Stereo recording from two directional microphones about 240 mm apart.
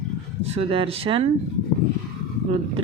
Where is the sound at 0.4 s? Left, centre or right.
Right.